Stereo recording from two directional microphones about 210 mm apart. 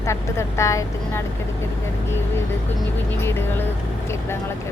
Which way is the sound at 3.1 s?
10° left (ahead or behind).